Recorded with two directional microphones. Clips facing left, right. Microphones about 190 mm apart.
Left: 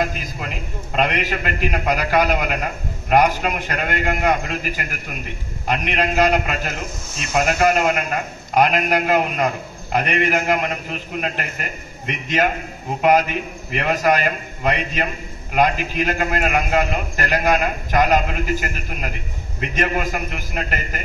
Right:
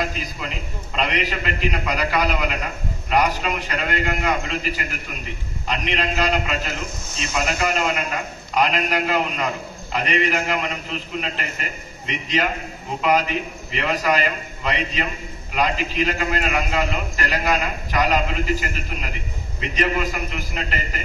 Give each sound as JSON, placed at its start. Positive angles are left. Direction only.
{"t": 0.9, "sound": "a man's voice", "side_deg": 50}